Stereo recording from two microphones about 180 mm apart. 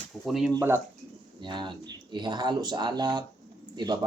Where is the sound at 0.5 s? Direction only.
15° right (ahead or behind).